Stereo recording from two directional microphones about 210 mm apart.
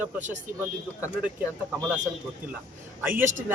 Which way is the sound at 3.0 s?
10° right (ahead or behind).